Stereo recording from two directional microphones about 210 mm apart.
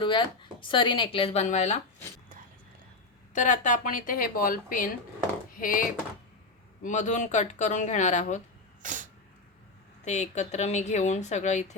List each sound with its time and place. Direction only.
0.0 s speech: 20° left (ahead or behind)
3.3 s a woman's voice: 35° left (ahead or behind)
8.8 s sneeze: 35° right (ahead or behind)
10.0 s a woman's voice: 35° left (ahead or behind)